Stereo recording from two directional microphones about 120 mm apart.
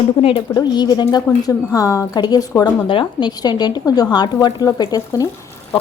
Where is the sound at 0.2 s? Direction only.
50° left (ahead or behind).